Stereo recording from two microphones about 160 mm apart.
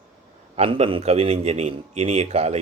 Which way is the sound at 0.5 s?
40° right (ahead or behind).